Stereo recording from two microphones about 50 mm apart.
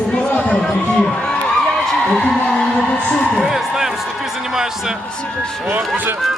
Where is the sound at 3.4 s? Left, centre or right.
Centre.